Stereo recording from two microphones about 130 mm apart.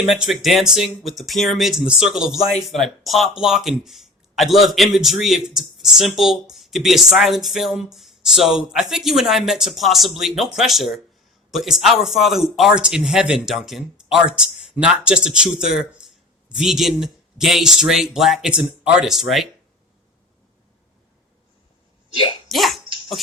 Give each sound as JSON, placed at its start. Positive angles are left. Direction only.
{"t": 0.1, "sound": "speech", "side_deg": 0}
{"t": 22.1, "sound": "speech", "side_deg": 40}
{"t": 22.4, "sound": "speech", "side_deg": 0}